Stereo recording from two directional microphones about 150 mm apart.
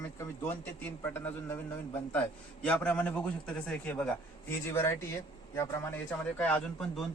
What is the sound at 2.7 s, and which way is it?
A man's voice, 10° left (ahead or behind).